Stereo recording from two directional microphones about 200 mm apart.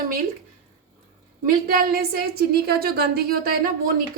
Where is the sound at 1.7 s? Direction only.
45° right (ahead or behind).